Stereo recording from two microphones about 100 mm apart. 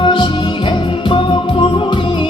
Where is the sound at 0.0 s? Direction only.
55° left (ahead or behind).